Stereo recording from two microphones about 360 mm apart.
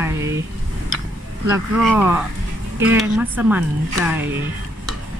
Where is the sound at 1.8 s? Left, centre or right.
Centre.